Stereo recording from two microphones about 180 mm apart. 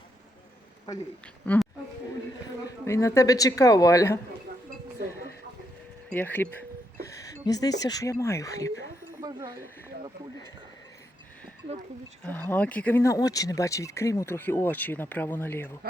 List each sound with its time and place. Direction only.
1.5 s speech: 10° left (ahead or behind)
2.8 s speech: 15° left (ahead or behind)
6.1 s speech: 10° left (ahead or behind)
9.2 s speech: 20° right (ahead or behind)
12.3 s speech: 10° left (ahead or behind)